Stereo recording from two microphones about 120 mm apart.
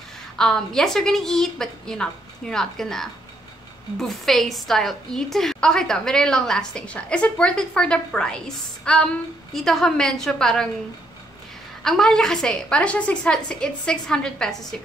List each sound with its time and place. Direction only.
0.4 s a woman's voice: 5° left (ahead or behind)
8.9 s female singing: 5° left (ahead or behind)
9.5 s a woman's voice: centre (ahead or behind)
11.8 s a woman's voice: 5° left (ahead or behind)